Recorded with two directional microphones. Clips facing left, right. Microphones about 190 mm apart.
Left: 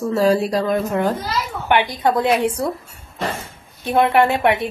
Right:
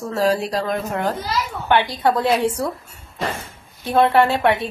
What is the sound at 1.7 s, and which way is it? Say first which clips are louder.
Speech: even; 15° left (ahead or behind).